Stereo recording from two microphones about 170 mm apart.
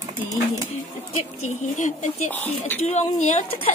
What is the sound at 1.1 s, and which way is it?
A woman's voice, 45° left (ahead or behind).